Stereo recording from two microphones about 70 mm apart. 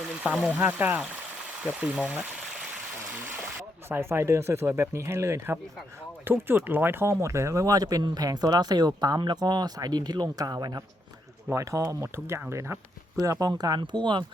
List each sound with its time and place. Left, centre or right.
0.2 s speech: centre
3.8 s speech: right
11.5 s speech: right
13.1 s speech: right
13.5 s speech: right